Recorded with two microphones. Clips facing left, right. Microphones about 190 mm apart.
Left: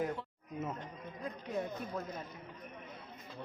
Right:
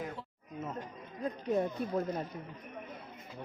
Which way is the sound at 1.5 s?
40° right (ahead or behind).